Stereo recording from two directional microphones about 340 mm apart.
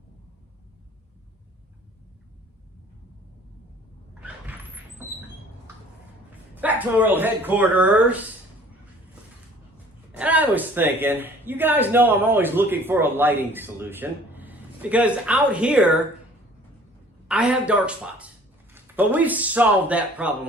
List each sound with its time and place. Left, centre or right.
4.1 s vehicle: centre
6.6 s speech: centre
10.1 s speech: centre
17.2 s speech: centre